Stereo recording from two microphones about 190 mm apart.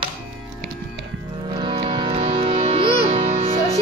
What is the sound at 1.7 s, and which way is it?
Music, 25° right (ahead or behind).